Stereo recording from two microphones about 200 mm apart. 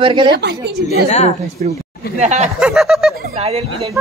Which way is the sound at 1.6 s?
40° right (ahead or behind).